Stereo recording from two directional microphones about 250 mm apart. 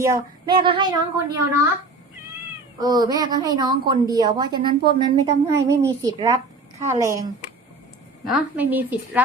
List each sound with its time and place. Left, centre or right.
0.0 s a woman's voice: centre
2.8 s a woman's voice: centre